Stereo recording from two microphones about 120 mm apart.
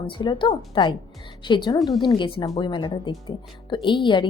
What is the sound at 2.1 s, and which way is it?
Speech, 40° left (ahead or behind).